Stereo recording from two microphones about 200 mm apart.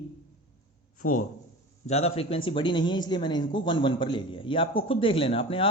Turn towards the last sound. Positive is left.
turn(degrees=25)  # may be behind; listen again after turning